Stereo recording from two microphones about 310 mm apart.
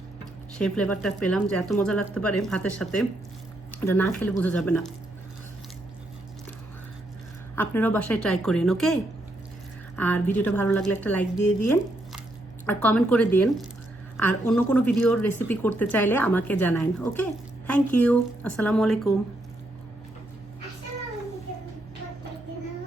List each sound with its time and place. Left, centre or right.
0.6 s a woman's voice: centre
7.5 s a woman's voice: centre
11.6 s a sound: centre
12.6 s a woman's voice: centre